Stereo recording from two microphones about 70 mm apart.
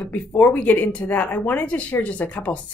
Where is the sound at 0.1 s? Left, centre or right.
Left.